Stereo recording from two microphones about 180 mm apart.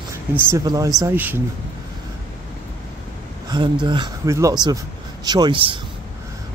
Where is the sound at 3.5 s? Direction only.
25° right (ahead or behind).